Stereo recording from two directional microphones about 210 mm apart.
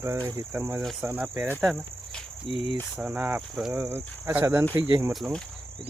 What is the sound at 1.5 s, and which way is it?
Speech, centre (ahead or behind).